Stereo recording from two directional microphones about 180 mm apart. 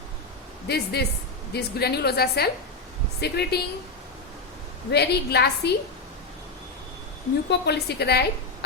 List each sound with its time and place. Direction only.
0.7 s a woman's voice: 65° left (ahead or behind)
4.9 s a woman's voice: 65° left (ahead or behind)
7.5 s a woman's voice: 70° left (ahead or behind)